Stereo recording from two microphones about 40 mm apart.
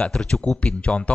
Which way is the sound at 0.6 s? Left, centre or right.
Left.